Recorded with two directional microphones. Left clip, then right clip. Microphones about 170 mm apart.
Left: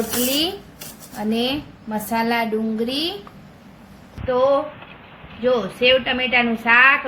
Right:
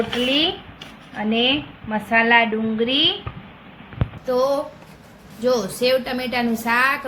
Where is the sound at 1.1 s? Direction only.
15° left (ahead or behind).